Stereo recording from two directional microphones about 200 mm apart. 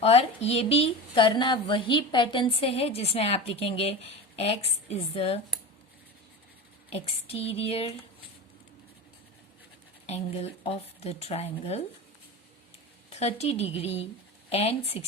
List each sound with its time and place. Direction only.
0.0 s a woman's voice: 30° left (ahead or behind)
6.9 s a woman's voice: 30° left (ahead or behind)
10.1 s speech: 30° left (ahead or behind)
13.1 s a woman's voice: 30° left (ahead or behind)